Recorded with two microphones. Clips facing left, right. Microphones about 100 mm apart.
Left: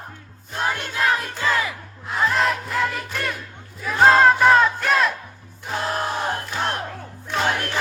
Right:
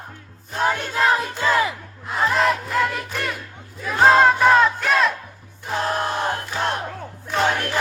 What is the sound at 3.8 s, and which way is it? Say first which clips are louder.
Battle cry: even; centre (ahead or behind).